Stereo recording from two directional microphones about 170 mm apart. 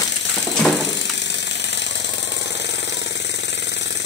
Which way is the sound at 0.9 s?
90° left.